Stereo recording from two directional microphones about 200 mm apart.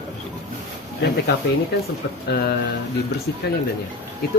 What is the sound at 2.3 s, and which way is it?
Speech, 50° left (ahead or behind).